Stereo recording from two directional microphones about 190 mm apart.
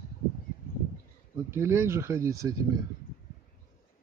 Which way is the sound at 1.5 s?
15° right (ahead or behind).